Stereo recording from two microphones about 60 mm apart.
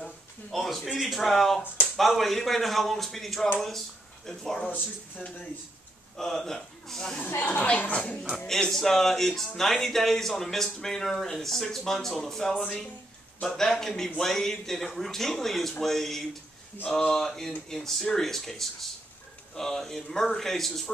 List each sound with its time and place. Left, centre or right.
0.0 s a sound: centre
1.0 s speech: centre
4.6 s speech: left
6.1 s speech: centre
7.4 s speech: left
8.5 s speech: centre